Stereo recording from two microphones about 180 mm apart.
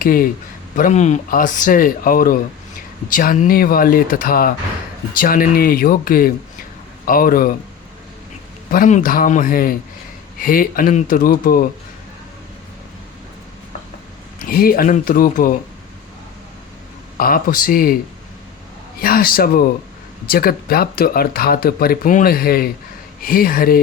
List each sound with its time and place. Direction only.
0.0 s speech: 50° left (ahead or behind)
0.8 s speech: 40° left (ahead or behind)
8.7 s speech: 45° left (ahead or behind)
14.4 s speech: 55° left (ahead or behind)
17.2 s speech: 55° left (ahead or behind)
18.9 s speech: 55° left (ahead or behind)